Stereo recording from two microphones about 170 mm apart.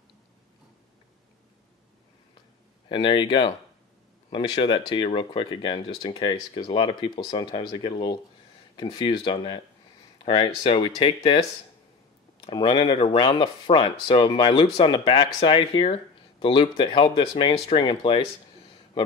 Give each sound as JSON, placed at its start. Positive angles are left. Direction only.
{"t": 2.9, "sound": "speech", "side_deg": 30}
{"t": 12.4, "sound": "speech", "side_deg": 30}